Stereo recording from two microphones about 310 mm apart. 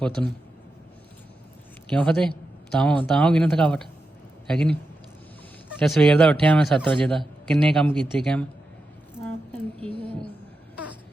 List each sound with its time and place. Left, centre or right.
0.0 s a man's voice: centre
1.9 s a man's voice: centre
9.5 s a sound: centre